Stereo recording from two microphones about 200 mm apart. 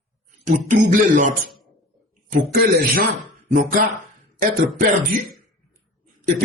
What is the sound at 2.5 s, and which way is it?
Speech, 50° right (ahead or behind).